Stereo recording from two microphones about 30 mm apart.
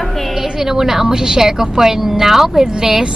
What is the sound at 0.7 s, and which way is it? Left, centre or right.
A woman's voice, centre.